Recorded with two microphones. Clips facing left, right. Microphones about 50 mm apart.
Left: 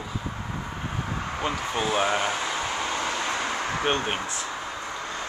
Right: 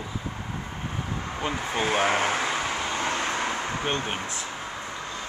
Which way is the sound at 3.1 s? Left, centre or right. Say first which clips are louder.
Right 1 dB; right.